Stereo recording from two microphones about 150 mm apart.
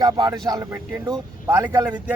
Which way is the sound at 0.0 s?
25° right (ahead or behind).